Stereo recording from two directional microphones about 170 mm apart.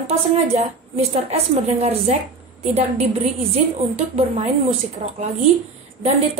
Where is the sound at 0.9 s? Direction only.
40° right (ahead or behind).